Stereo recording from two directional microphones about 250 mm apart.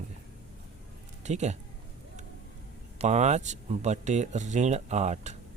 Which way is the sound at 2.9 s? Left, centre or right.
Right.